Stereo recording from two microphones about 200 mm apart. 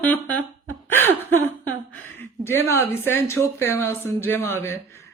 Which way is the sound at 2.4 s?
15° left (ahead or behind).